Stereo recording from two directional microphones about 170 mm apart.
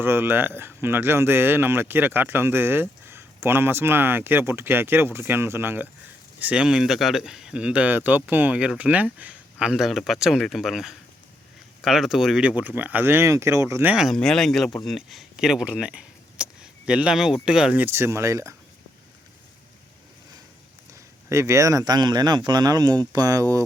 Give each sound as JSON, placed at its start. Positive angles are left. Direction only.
{"t": 0.0, "sound": "speech", "side_deg": -15}
{"t": 13.9, "sound": "speech", "side_deg": 0}
{"t": 20.9, "sound": "speech", "side_deg": -15}